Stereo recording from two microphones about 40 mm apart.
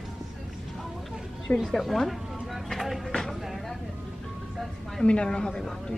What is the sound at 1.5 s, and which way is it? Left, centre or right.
Speech, left.